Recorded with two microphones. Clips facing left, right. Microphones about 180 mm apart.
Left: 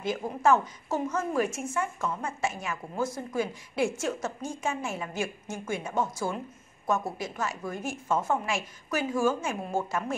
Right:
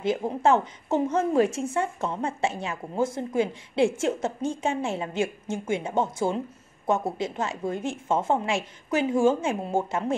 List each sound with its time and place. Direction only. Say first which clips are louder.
0.0 s speech: right 3 dB; 25° right (ahead or behind)